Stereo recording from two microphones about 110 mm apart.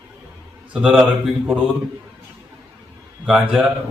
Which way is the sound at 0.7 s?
5° right (ahead or behind).